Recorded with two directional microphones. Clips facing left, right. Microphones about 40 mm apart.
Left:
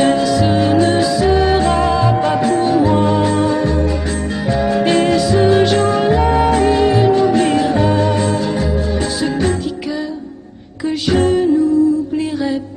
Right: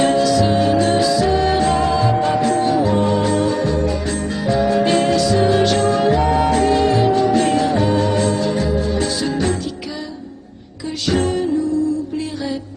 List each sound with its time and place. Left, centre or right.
0.0 s music: centre
4.9 s music: centre
10.9 s music: centre